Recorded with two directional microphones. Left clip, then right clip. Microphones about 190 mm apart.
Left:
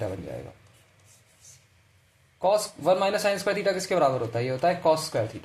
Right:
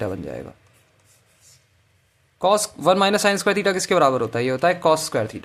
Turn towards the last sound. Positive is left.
turn(degrees=-45)  # may be behind; listen again after turning